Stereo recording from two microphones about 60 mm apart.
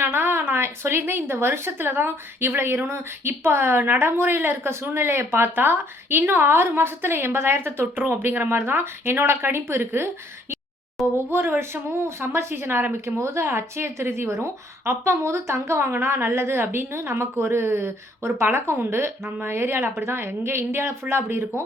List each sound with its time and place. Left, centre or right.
0.0 s a woman's voice: right
11.3 s a woman's voice: right
13.1 s a woman's voice: right